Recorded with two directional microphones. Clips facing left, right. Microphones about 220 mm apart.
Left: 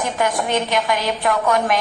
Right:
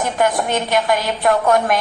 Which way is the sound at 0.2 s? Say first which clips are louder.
Right 2 dB; 50° right (ahead or behind).